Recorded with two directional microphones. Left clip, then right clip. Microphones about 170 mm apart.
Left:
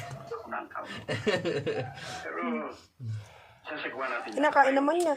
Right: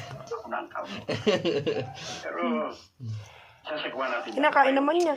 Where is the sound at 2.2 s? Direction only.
25° right (ahead or behind).